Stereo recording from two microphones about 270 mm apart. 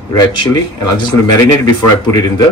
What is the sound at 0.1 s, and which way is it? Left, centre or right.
Speech, centre.